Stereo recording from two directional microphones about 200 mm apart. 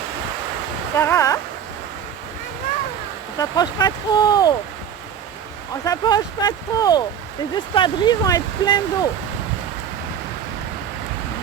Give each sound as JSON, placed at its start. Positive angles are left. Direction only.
{"t": 0.9, "sound": "speech", "side_deg": 15}
{"t": 3.3, "sound": "speech", "side_deg": 20}
{"t": 5.8, "sound": "speech", "side_deg": 20}